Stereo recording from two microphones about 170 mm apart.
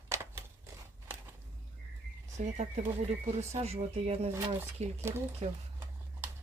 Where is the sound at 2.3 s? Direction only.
40° right (ahead or behind).